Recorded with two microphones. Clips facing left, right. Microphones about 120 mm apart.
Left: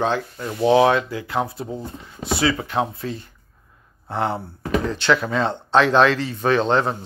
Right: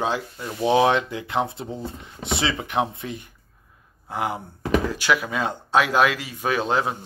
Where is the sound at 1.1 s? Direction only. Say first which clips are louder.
Left 1 dB; 20° right (ahead or behind).